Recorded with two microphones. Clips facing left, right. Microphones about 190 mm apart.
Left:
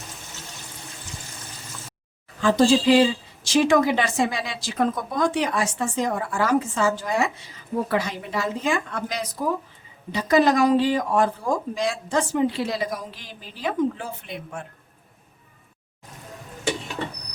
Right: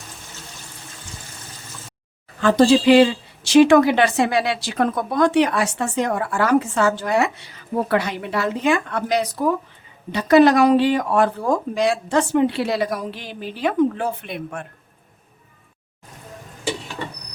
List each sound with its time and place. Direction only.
2.4 s speech: 65° right (ahead or behind)